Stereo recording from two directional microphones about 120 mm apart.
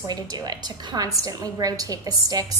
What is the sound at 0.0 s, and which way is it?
A woman's voice, 35° right (ahead or behind).